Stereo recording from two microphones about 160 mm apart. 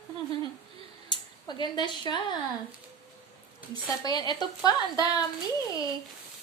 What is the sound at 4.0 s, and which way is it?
A child's voice, 25° left (ahead or behind).